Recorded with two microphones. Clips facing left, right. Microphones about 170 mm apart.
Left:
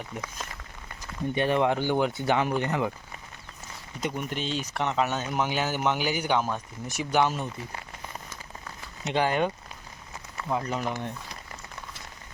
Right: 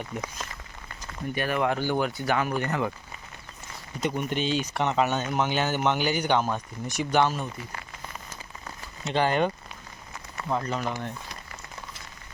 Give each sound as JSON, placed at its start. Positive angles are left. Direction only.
{"t": 1.3, "sound": "speech", "side_deg": 25}
{"t": 4.0, "sound": "speech", "side_deg": 5}
{"t": 7.3, "sound": "speech", "side_deg": 20}
{"t": 9.0, "sound": "speech", "side_deg": 10}
{"t": 10.5, "sound": "speech", "side_deg": 10}